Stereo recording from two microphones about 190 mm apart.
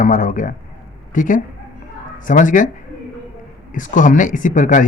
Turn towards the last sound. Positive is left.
turn(degrees=40)  # may be behind; listen again after turning